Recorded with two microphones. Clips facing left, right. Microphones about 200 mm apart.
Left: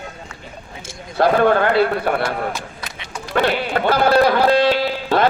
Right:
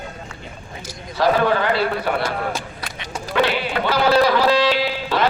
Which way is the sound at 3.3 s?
50° left (ahead or behind).